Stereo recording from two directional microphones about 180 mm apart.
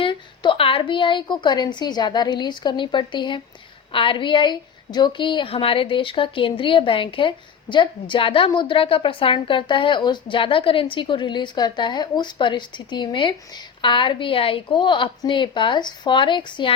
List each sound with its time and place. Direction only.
0.0 s a woman's voice: 30° left (ahead or behind)